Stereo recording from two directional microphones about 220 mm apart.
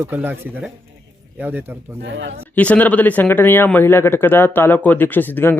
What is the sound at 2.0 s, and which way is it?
Speech, 55° right (ahead or behind).